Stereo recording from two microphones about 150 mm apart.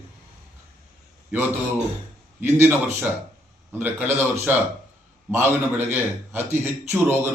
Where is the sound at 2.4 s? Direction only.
15° right (ahead or behind).